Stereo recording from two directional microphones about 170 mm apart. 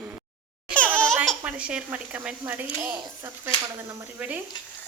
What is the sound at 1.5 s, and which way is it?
Speech, 5° right (ahead or behind).